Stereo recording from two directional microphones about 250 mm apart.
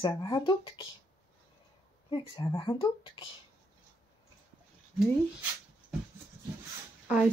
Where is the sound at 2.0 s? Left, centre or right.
Centre.